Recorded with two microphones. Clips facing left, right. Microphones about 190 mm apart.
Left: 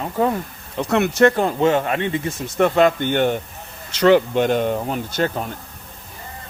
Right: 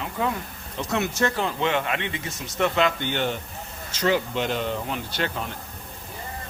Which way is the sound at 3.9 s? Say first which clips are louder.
Left 9 dB; 65° left (ahead or behind).